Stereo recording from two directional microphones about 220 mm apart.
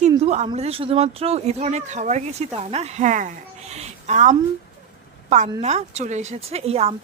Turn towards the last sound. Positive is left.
turn(degrees=-30)  # may be behind; listen again after turning